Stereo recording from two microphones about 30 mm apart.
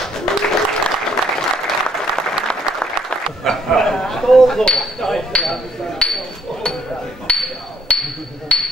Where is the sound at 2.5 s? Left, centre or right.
Left.